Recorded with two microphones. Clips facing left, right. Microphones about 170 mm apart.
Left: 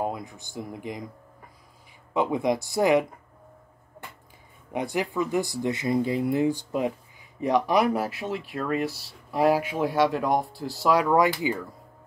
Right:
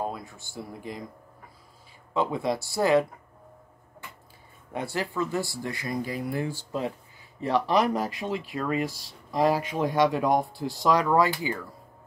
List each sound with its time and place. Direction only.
0.0 s speech: 15° left (ahead or behind)
2.1 s speech: 15° left (ahead or behind)
4.7 s speech: 15° left (ahead or behind)